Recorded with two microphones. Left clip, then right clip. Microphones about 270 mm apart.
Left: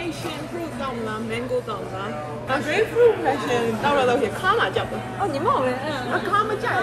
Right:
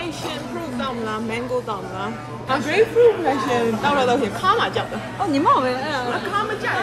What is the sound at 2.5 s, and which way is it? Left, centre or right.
Speech, right.